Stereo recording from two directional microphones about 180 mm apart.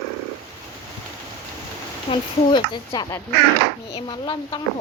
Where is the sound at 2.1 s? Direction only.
25° left (ahead or behind).